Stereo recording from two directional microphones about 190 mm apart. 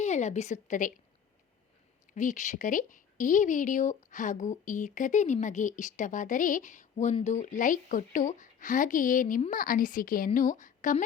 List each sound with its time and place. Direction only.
0.0 s a woman's voice: 35° left (ahead or behind)
2.1 s speech: 40° left (ahead or behind)